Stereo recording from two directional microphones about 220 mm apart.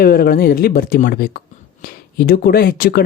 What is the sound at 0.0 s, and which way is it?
Speech, 45° left (ahead or behind).